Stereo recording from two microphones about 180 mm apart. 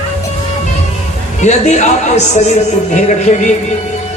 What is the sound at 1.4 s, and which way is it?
A man's voice, 40° left (ahead or behind).